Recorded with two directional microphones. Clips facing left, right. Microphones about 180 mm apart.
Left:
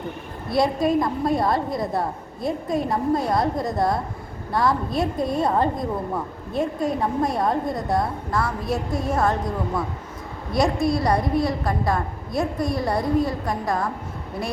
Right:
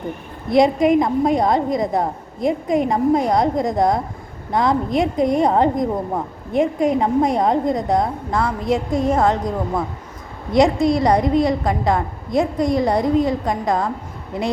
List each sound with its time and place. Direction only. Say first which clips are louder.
0.5 s a woman's voice: right 6 dB; 20° right (ahead or behind)
10.5 s a woman's voice: right 6 dB; 20° right (ahead or behind)